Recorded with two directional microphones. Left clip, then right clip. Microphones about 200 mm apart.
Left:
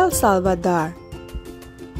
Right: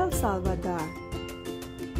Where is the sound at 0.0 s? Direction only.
45° left (ahead or behind).